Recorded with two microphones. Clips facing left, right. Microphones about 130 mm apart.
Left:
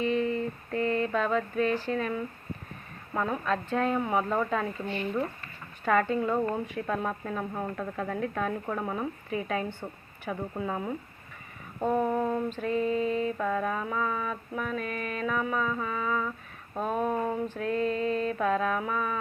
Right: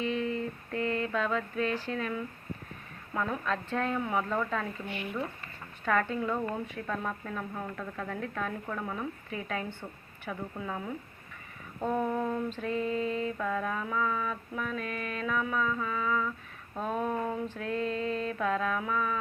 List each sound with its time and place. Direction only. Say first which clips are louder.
0.0 s a sound: left 4 dB; centre (ahead or behind)
3.1 s mantra: left 3 dB; 15° left (ahead or behind)
3.9 s speech: left 3 dB; 20° left (ahead or behind)
5.8 s mantra: left 4 dB; 10° left (ahead or behind)
6.8 s speech: left 4 dB; 20° left (ahead or behind)
7.5 s speech: left 4 dB; 30° left (ahead or behind)
8.1 s mantra: left 5 dB; 10° left (ahead or behind)
8.6 s speech: left 4 dB; 25° left (ahead or behind)
9.3 s mantra: left 6 dB; 5° left (ahead or behind)
9.8 s speech: left 4 dB; 25° left (ahead or behind)
12.5 s mantra: left 4 dB; 5° left (ahead or behind)
13.3 s mantra: left 3 dB; 15° left (ahead or behind)